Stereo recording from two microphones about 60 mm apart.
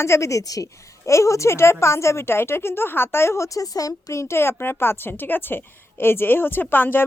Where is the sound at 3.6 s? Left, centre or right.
Left.